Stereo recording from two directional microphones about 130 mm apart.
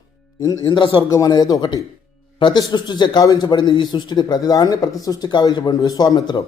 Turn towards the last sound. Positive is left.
turn(degrees=30)  # may be behind; listen again after turning